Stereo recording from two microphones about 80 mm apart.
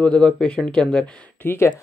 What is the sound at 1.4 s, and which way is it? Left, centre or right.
Speech, left.